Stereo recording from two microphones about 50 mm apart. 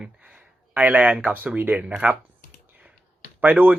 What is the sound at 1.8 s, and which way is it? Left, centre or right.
Speech, right.